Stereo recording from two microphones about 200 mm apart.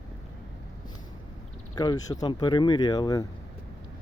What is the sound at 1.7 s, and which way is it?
Speech, 20° left (ahead or behind).